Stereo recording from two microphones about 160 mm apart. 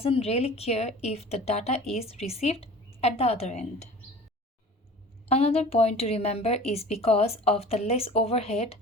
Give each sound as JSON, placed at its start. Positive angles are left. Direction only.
{"t": 0.0, "sound": "a woman's voice", "side_deg": 40}
{"t": 5.3, "sound": "a woman's voice", "side_deg": 40}